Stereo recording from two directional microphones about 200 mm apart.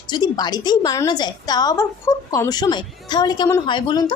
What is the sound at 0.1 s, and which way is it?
A woman's voice, 20° left (ahead or behind).